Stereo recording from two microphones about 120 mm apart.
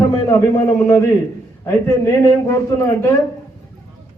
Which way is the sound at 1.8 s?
20° left (ahead or behind).